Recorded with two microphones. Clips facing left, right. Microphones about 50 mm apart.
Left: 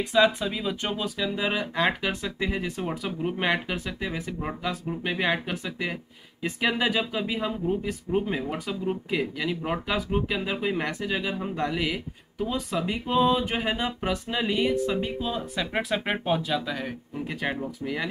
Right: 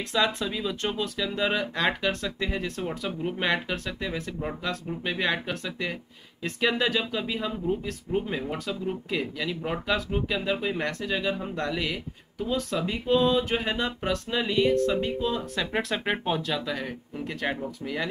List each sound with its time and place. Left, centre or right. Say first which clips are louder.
0.0 s speech: left 4 dB; centre